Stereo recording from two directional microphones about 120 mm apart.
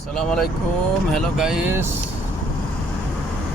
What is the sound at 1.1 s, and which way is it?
Speech, 5° right (ahead or behind).